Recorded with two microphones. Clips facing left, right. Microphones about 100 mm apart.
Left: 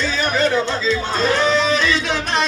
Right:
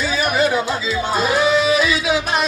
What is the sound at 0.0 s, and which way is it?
Speech, 10° right (ahead or behind).